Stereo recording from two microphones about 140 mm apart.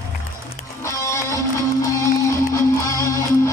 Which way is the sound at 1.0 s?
20° left (ahead or behind).